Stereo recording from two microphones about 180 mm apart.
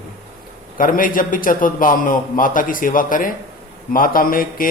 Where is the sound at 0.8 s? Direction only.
50° left (ahead or behind).